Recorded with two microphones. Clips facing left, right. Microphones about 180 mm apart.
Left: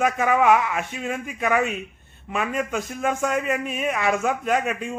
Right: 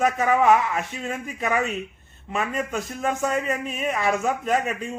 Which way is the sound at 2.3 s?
Centre (ahead or behind).